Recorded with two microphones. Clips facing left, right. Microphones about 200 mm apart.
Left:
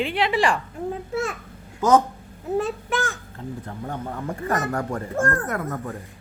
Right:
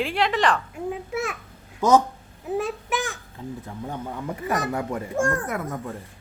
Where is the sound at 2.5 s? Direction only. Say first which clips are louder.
Left 2 dB; 15° right (ahead or behind).